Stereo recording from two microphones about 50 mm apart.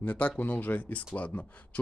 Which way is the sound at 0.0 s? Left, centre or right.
Left.